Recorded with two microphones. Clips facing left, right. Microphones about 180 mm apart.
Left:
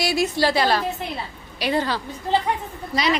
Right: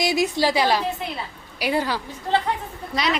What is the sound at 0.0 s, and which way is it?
A woman's voice, 20° right (ahead or behind).